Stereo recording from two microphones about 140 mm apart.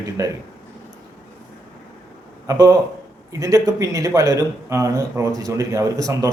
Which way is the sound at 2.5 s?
20° right (ahead or behind).